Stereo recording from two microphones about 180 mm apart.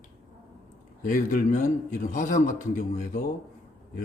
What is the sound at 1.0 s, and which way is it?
A man's voice, 45° left (ahead or behind).